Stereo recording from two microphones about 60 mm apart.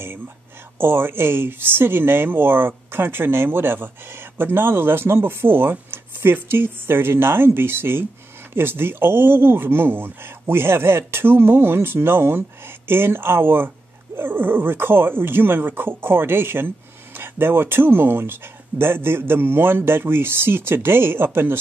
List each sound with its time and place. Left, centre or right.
0.7 s speech: right